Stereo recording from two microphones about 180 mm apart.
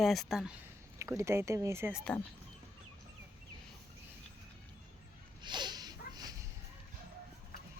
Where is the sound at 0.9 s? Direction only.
15° right (ahead or behind).